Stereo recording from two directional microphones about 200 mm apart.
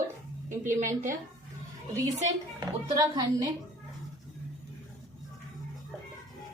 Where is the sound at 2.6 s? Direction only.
20° right (ahead or behind).